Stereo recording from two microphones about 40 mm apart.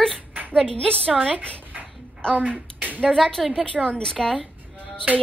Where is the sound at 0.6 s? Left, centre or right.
Left.